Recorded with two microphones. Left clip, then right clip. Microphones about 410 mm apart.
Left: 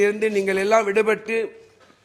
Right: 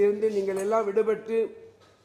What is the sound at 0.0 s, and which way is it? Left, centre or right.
A man's voice, left.